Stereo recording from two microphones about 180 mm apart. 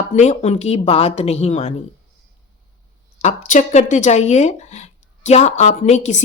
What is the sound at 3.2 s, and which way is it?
A woman's voice, 40° left (ahead or behind).